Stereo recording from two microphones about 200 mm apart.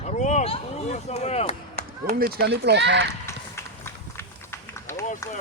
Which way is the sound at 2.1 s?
55° right (ahead or behind).